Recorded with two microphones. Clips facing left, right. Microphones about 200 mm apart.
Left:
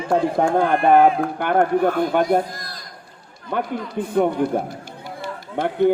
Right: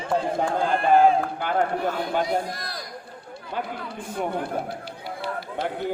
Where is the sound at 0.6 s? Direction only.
60° left (ahead or behind).